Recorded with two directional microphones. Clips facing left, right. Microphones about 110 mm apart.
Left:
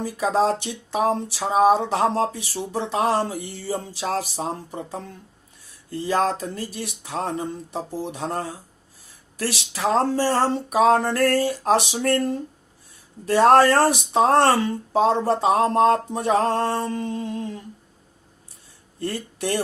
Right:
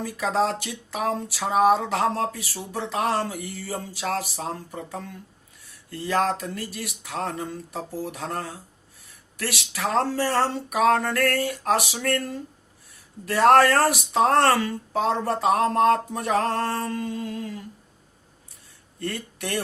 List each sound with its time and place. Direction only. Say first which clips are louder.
0.0 s speech: left 3 dB; 25° left (ahead or behind)
18.9 s speech: left 3 dB; 25° left (ahead or behind)